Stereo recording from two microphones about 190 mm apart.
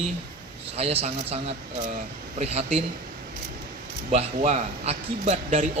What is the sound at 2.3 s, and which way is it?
Speech, 35° right (ahead or behind).